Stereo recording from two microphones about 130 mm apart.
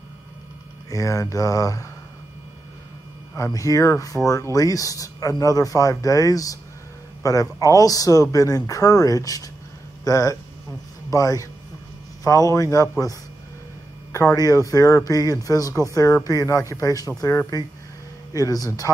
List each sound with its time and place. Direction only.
0.8 s speech: 25° left (ahead or behind)
3.3 s speech: 25° left (ahead or behind)